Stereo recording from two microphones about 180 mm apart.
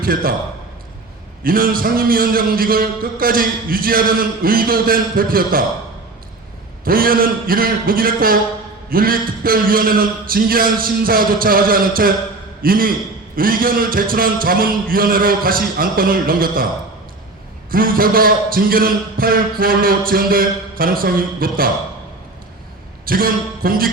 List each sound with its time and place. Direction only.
0.0 s a man's voice: 55° right (ahead or behind)
1.5 s a man's voice: 50° right (ahead or behind)
6.8 s a man's voice: 55° right (ahead or behind)
17.7 s a man's voice: 55° right (ahead or behind)
23.0 s a man's voice: 55° right (ahead or behind)